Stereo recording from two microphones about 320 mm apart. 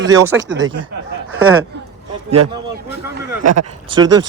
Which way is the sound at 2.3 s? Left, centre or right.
Centre.